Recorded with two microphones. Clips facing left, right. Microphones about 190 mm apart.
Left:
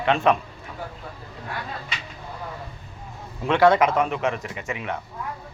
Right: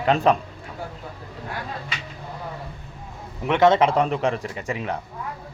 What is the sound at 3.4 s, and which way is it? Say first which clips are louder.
Speech: even; 20° right (ahead or behind).